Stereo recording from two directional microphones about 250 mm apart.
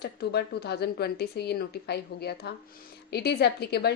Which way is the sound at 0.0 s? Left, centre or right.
Left.